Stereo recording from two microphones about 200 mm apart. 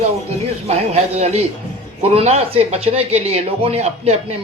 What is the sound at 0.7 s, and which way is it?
Speech, 30° right (ahead or behind).